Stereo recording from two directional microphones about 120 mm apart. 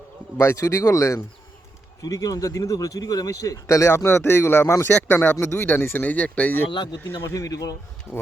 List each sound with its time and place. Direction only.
0.3 s speech: 25° left (ahead or behind)
7.3 s speech: 30° left (ahead or behind)